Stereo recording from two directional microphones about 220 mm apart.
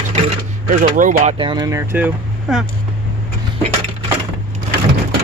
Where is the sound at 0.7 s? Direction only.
35° right (ahead or behind); by 2.6 s 5° right (ahead or behind).